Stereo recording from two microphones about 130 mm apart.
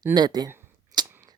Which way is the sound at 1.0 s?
35° right (ahead or behind).